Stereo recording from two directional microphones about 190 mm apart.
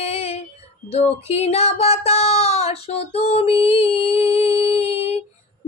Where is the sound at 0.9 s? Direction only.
35° left (ahead or behind).